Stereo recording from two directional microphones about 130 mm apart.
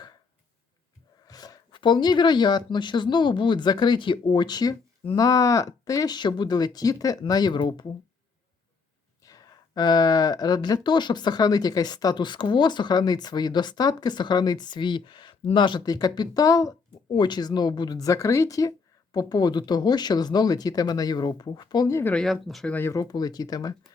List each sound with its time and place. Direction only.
1.3 s speech: 30° left (ahead or behind)
9.2 s speech: 25° left (ahead or behind)
22.1 s speech: 5° left (ahead or behind)
22.7 s speech: 20° left (ahead or behind)